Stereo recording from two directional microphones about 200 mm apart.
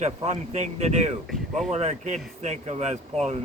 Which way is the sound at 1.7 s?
35° right (ahead or behind).